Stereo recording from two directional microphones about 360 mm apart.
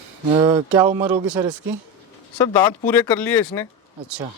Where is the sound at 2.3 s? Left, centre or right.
Centre.